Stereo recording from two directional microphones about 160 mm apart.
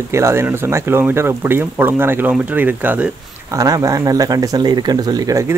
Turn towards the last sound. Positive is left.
turn(degrees=-20)  # may be behind; listen again after turning